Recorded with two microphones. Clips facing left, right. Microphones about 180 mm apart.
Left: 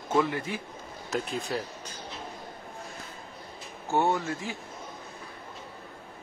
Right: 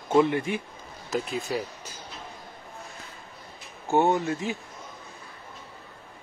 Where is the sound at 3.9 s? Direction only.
20° right (ahead or behind).